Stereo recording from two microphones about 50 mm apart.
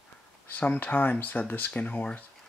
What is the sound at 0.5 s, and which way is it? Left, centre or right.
Speech, left.